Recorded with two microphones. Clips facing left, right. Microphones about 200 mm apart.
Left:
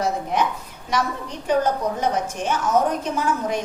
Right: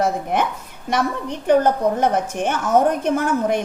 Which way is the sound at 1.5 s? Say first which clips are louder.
Right 5 dB; 55° right (ahead or behind).